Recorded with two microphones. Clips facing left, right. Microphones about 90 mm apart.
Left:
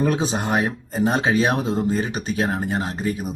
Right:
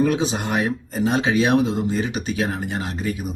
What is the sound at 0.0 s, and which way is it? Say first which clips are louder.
Speech: right 1 dB; 35° left (ahead or behind).